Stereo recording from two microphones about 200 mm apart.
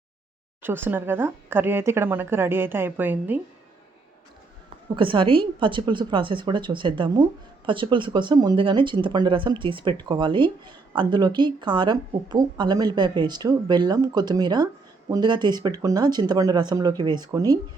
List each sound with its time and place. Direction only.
0.6 s speech: 10° right (ahead or behind)
4.9 s a woman's voice: 25° right (ahead or behind)